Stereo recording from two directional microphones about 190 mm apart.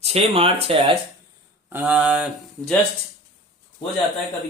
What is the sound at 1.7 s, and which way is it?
Speech, 10° right (ahead or behind).